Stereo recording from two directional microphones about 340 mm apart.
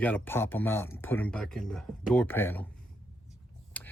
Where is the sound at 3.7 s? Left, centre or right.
Centre.